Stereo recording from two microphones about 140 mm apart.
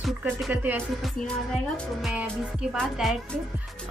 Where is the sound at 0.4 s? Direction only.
10° right (ahead or behind).